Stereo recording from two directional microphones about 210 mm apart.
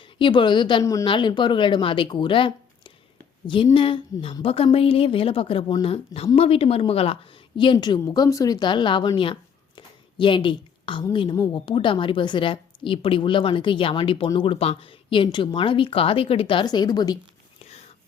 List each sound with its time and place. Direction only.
0.0 s a woman's voice: 25° left (ahead or behind)